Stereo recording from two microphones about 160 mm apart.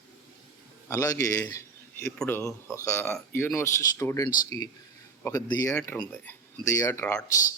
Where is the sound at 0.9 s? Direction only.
20° left (ahead or behind).